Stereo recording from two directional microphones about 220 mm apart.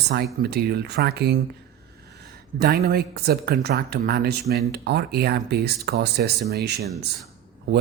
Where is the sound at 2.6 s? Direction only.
45° right (ahead or behind).